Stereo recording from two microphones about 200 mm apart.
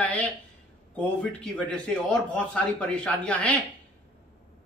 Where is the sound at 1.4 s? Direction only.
5° left (ahead or behind).